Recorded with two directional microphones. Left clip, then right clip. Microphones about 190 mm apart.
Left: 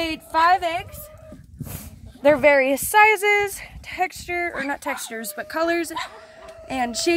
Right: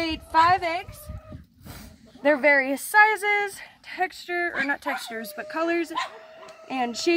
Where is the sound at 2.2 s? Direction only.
35° left (ahead or behind).